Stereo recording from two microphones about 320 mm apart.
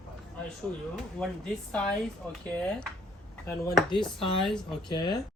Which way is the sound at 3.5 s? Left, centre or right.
Centre.